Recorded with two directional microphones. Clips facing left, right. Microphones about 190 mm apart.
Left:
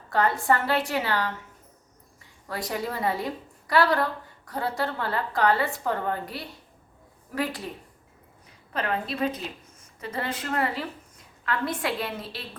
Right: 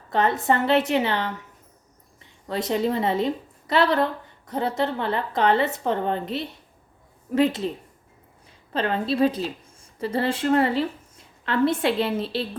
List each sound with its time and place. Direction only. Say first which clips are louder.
0.1 s a woman's voice: right 2 dB; 20° right (ahead or behind)
2.5 s a woman's voice: right 7 dB; 25° right (ahead or behind)
8.7 s a woman's voice: right 5 dB; 30° right (ahead or behind)